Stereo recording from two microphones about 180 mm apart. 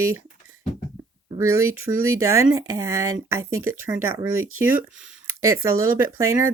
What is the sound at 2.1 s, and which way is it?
Speech, 15° right (ahead or behind).